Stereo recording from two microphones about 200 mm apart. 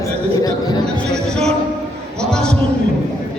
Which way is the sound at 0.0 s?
20° left (ahead or behind).